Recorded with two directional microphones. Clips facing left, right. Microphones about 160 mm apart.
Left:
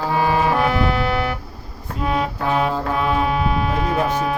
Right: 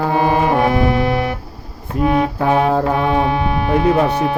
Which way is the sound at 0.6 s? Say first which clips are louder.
Right 4 dB; 25° right (ahead or behind).